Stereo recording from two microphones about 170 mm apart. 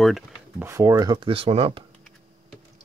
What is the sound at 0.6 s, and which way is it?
Speech, 15° right (ahead or behind).